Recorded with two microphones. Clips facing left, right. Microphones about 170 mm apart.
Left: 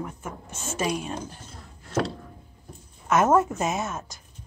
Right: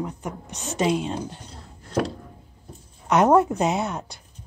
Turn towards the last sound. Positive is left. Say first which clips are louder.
# right 4 dB
turn(degrees=-15)  # may be behind; listen again after turning